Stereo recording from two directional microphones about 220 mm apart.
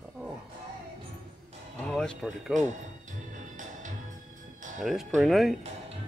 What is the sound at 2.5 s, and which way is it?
Music, 35° right (ahead or behind).